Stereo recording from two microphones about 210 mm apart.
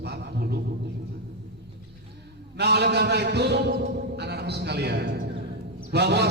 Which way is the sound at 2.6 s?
50° right (ahead or behind).